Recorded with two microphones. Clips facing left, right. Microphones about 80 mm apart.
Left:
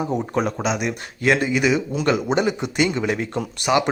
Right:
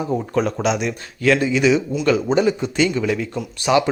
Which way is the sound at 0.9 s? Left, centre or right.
Left.